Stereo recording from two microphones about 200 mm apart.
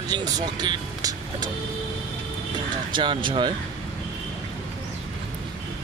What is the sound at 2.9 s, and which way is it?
Speech, 25° right (ahead or behind).